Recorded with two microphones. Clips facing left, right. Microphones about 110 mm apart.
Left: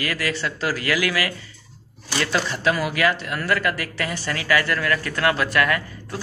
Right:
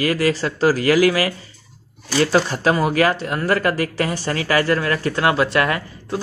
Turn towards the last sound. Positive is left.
turn(degrees=-25)  # may be behind; listen again after turning